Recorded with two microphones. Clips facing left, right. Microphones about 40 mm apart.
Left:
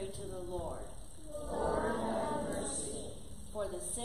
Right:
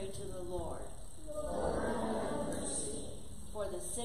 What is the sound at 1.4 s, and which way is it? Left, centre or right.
Choir, left.